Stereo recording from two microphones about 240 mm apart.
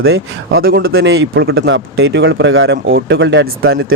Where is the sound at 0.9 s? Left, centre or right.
Right.